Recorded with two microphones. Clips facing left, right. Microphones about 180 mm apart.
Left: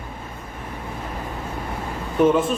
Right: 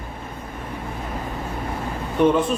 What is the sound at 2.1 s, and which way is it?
Speech, 5° left (ahead or behind).